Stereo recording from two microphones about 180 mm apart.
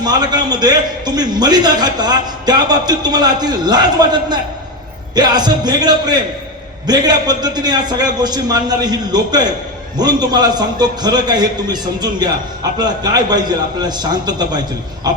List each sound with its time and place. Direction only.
0.0 s a man's voice: 25° right (ahead or behind)